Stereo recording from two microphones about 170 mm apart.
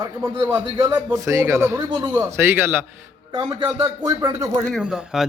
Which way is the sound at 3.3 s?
25° right (ahead or behind).